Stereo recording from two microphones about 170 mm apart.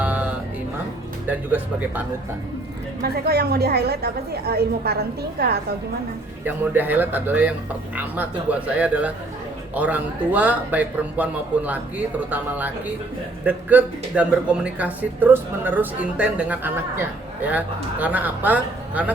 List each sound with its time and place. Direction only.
0.0 s music: 10° right (ahead or behind)
1.3 s speech: 10° right (ahead or behind)
3.0 s a woman's voice: 65° right (ahead or behind)
6.4 s speech: 10° right (ahead or behind)